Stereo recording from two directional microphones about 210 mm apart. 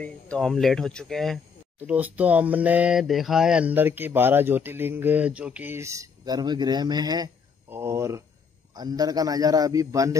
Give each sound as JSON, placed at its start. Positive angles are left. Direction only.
{"t": 0.0, "sound": "speech", "side_deg": 5}